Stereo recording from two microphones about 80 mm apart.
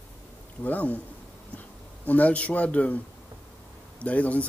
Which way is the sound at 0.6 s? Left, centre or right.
Centre.